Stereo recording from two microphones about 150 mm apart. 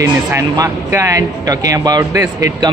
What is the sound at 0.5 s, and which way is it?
A man's voice, 20° right (ahead or behind).